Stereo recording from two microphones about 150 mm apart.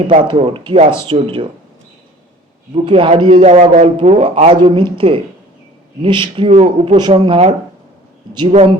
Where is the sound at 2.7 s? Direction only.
40° right (ahead or behind).